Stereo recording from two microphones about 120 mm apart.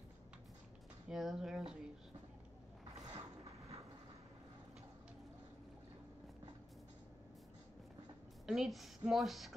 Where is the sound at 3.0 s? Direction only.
30° right (ahead or behind).